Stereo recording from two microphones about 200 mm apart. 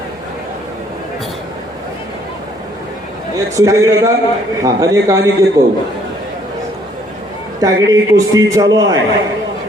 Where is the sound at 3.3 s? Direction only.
15° right (ahead or behind).